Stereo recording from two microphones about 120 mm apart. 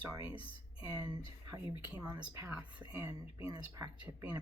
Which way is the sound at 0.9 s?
30° right (ahead or behind).